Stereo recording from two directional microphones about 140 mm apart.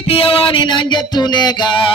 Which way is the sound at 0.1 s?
45° left (ahead or behind).